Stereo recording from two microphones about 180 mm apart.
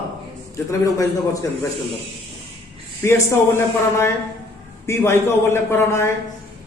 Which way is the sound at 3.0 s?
15° left (ahead or behind).